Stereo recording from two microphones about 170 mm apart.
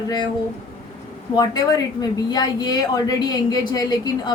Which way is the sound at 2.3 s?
25° left (ahead or behind).